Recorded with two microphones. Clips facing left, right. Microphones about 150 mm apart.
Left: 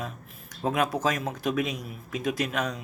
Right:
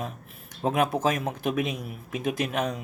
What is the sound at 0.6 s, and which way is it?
Speech, 30° right (ahead or behind).